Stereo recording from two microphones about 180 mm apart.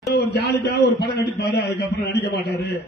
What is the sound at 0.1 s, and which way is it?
A man's voice, 65° left (ahead or behind).